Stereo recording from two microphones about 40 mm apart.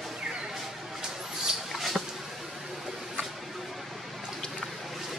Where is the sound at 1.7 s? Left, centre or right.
Centre.